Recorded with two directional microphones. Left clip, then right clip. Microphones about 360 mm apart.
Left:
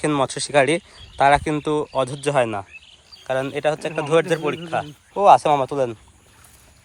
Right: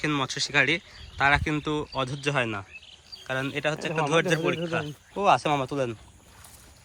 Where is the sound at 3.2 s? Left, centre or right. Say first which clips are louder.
Left 7 dB; centre.